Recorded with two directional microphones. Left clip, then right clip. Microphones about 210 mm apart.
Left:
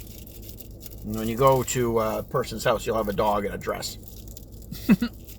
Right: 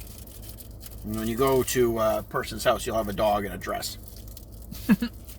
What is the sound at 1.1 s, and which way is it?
Speech, 40° right (ahead or behind).